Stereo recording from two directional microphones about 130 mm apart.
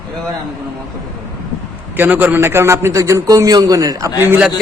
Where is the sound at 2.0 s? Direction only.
15° right (ahead or behind).